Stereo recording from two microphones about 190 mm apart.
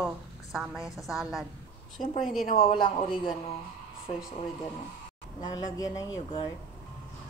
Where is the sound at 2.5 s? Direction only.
30° left (ahead or behind).